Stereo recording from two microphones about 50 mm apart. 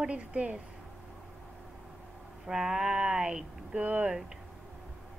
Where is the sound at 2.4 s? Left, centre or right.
Centre.